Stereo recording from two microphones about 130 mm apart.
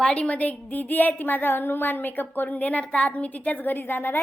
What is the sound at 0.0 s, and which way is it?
A woman's voice, 10° left (ahead or behind).